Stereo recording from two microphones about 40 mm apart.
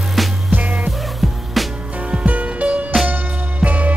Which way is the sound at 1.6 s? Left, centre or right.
Centre.